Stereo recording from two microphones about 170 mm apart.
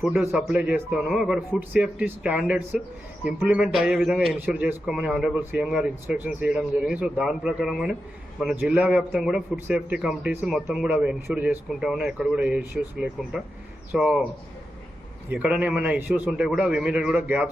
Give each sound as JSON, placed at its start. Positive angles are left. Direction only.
{"t": 0.0, "sound": "a man's voice", "side_deg": 0}
{"t": 15.3, "sound": "a man's voice", "side_deg": -10}